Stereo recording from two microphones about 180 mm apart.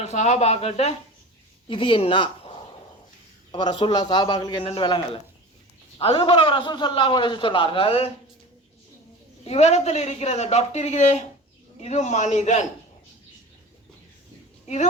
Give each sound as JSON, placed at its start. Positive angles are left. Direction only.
{"t": 0.0, "sound": "a man's voice", "side_deg": 40}
{"t": 9.4, "sound": "speech", "side_deg": 35}